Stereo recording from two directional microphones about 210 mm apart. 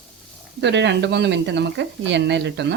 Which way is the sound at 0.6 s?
55° right (ahead or behind).